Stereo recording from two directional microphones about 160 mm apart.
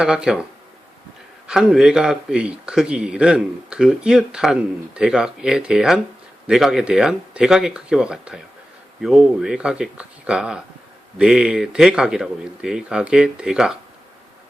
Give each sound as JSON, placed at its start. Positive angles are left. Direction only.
{"t": 0.0, "sound": "a man's voice", "side_deg": -5}
{"t": 1.5, "sound": "a man's voice", "side_deg": -5}